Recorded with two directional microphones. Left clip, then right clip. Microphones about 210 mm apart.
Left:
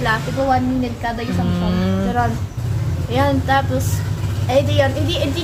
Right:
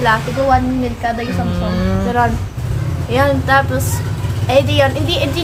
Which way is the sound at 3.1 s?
20° right (ahead or behind).